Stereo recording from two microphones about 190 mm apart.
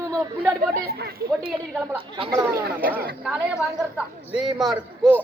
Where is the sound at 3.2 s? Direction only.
5° right (ahead or behind).